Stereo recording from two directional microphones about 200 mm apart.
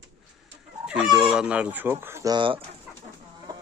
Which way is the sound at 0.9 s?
5° right (ahead or behind).